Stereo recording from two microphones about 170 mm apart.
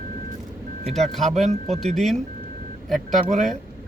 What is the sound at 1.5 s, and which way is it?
Speech, 40° right (ahead or behind).